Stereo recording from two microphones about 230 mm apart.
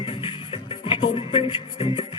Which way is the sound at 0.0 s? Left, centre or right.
Left.